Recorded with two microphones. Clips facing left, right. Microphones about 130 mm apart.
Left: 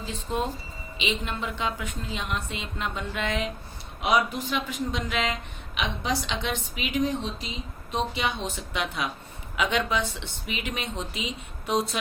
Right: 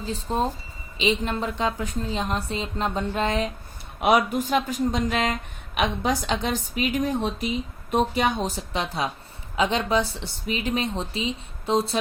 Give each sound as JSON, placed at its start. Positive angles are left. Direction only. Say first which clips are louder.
{"t": 0.1, "sound": "a woman's voice", "louder": "right 4 dB", "side_deg": -35}
{"t": 4.0, "sound": "a woman's voice", "louder": "right 4 dB", "side_deg": -55}